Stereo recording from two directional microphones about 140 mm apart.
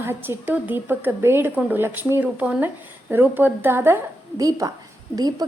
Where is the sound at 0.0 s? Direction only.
15° right (ahead or behind).